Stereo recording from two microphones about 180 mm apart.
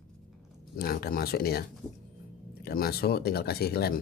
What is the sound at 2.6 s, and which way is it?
Speech, 60° left (ahead or behind).